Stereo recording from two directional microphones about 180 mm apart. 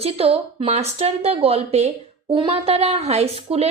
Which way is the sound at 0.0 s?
35° right (ahead or behind).